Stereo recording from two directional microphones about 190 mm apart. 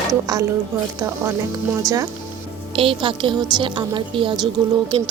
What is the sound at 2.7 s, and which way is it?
A woman's voice, 30° right (ahead or behind).